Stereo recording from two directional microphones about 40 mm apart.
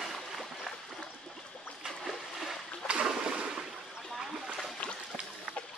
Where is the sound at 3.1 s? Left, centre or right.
Right.